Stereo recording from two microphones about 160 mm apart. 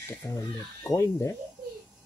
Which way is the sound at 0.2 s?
20° left (ahead or behind).